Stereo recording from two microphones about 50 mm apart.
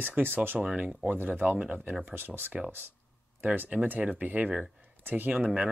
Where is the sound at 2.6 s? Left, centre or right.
Right.